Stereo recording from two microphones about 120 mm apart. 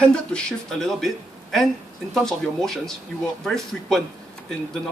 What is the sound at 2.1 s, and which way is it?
Speech, 5° left (ahead or behind).